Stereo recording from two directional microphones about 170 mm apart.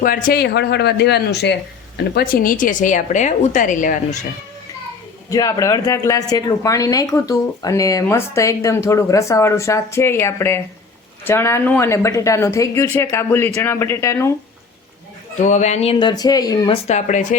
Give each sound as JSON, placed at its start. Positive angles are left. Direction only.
{"t": 0.0, "sound": "speech", "side_deg": 55}
{"t": 2.1, "sound": "a woman's voice", "side_deg": 60}
{"t": 5.3, "sound": "speech", "side_deg": 20}
{"t": 15.4, "sound": "speech", "side_deg": 45}
{"t": 16.8, "sound": "a woman's voice", "side_deg": 45}